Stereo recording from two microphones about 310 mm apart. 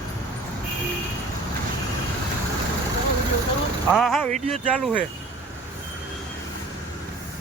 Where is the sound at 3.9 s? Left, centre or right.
Centre.